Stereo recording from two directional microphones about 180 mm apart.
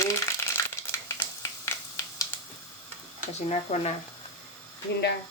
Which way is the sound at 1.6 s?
15° left (ahead or behind).